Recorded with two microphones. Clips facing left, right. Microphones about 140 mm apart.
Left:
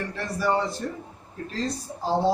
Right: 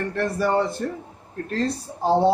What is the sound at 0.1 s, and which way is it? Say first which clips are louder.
A man's voice: right 3 dB; 55° right (ahead or behind).